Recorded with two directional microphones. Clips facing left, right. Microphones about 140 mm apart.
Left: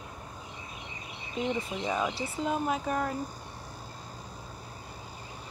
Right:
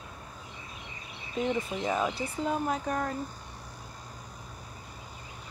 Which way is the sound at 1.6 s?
5° right (ahead or behind).